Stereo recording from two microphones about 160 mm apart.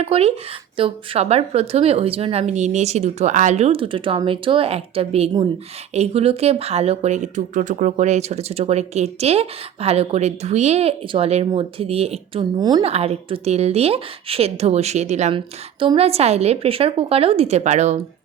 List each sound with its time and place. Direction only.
0.0 s speech: 40° right (ahead or behind)
12.8 s speech: 40° right (ahead or behind)